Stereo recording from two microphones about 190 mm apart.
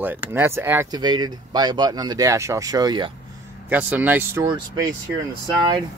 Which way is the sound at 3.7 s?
10° right (ahead or behind).